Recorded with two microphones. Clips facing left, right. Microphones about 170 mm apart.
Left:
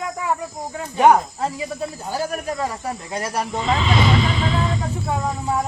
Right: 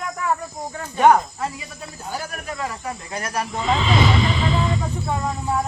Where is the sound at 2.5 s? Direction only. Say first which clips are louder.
Left 4 dB; 35° left (ahead or behind).